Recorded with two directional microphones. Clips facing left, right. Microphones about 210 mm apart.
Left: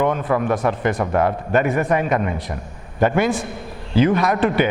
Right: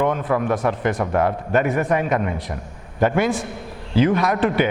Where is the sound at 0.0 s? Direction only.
15° left (ahead or behind).